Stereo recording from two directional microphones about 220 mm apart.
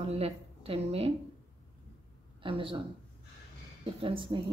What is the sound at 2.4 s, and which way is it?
Speech, 25° right (ahead or behind).